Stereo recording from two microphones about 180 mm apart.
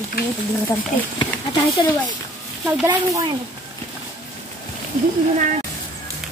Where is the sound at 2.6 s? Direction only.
10° right (ahead or behind).